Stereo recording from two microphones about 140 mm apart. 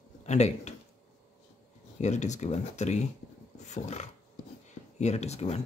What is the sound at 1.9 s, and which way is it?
Speech, 55° left (ahead or behind).